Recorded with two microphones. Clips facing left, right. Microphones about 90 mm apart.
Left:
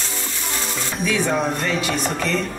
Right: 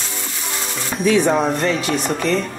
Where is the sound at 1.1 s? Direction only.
30° right (ahead or behind).